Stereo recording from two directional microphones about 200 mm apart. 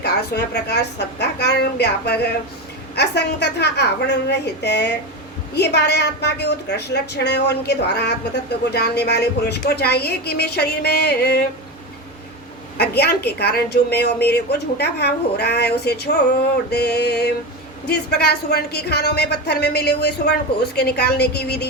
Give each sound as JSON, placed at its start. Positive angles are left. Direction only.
{"t": 0.0, "sound": "a woman's voice", "side_deg": 55}
{"t": 12.7, "sound": "a woman's voice", "side_deg": 55}